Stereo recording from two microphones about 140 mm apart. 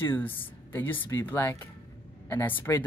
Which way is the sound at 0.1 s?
15° left (ahead or behind).